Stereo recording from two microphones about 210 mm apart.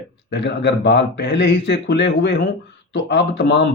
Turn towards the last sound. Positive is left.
turn(degrees=55)  # may be behind; listen again after turning